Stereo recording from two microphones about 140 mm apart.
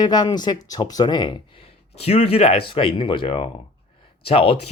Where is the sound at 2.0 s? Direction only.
50° left (ahead or behind).